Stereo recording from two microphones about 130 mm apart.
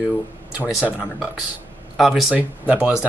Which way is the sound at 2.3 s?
10° right (ahead or behind).